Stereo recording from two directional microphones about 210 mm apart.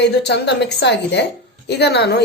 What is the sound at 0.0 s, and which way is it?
A woman's voice, 55° left (ahead or behind).